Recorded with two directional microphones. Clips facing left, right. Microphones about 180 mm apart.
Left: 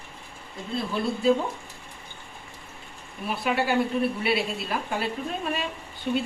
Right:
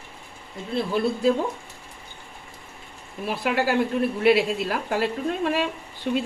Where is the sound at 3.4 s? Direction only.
80° right.